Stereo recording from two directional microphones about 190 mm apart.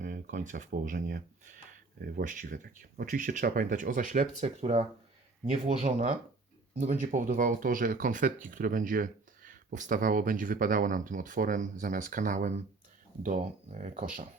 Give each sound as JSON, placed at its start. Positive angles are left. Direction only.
{"t": 0.0, "sound": "speech", "side_deg": -45}